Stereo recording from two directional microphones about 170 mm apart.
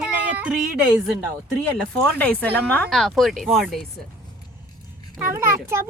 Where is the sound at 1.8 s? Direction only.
5° left (ahead or behind).